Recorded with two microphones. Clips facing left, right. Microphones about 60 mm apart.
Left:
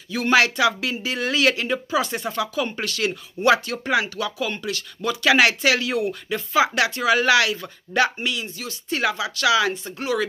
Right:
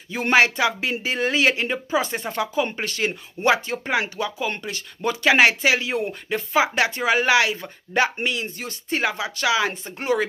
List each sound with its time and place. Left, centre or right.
0.1 s speech: right